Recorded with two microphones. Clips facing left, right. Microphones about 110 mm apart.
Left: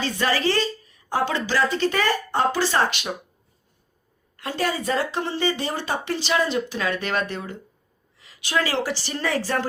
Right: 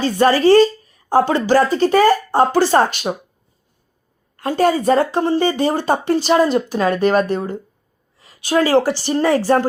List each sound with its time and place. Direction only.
0.0 s a woman's voice: 45° right (ahead or behind)
4.4 s a woman's voice: 45° right (ahead or behind)